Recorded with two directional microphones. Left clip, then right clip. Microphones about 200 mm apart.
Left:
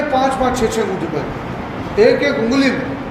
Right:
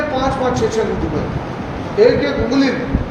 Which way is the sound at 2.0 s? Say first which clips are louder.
Even; 45° left (ahead or behind).